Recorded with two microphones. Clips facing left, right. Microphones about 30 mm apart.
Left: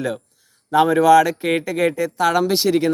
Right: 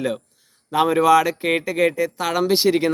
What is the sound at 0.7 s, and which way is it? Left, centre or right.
Speech, centre.